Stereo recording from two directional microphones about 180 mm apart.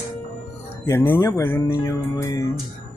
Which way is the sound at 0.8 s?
15° left (ahead or behind).